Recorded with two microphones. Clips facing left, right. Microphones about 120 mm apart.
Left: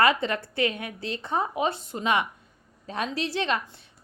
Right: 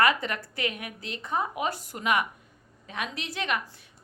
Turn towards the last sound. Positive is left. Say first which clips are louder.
# left 3 dB
turn(degrees=30)  # may be behind; listen again after turning